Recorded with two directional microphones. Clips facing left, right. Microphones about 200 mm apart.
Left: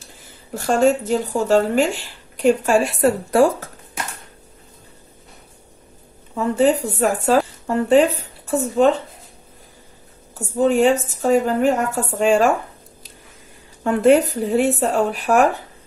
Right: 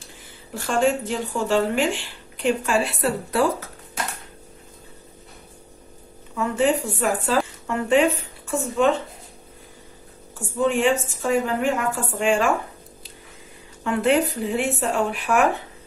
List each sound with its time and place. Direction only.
0.6 s speech: 40° left (ahead or behind)
6.3 s speech: 35° left (ahead or behind)
10.6 s a woman's voice: 40° left (ahead or behind)
13.8 s a woman's voice: 45° left (ahead or behind)